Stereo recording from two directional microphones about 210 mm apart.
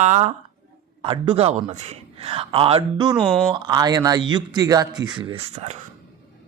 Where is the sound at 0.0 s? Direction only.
35° right (ahead or behind).